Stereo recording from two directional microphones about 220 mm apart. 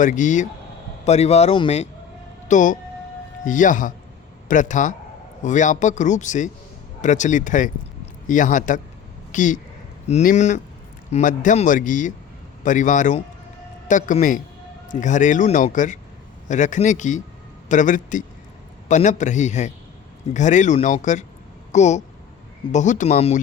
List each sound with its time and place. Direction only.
0.0 s speech: 35° left (ahead or behind)